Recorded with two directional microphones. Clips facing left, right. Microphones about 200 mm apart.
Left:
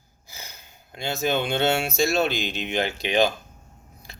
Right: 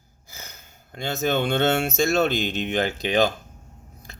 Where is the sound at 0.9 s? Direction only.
50° right (ahead or behind).